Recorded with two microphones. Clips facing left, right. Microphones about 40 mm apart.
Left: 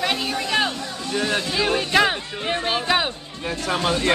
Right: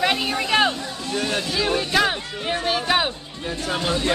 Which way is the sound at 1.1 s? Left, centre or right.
Centre.